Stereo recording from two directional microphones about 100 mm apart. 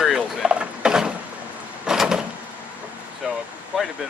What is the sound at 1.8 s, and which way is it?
Door, 5° right (ahead or behind).